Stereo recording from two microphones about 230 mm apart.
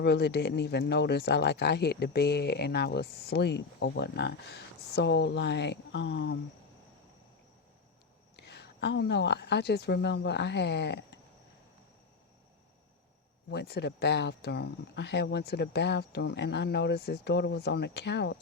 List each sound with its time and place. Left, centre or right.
0.0 s speech: left
8.4 s a woman's voice: left
13.5 s speech: left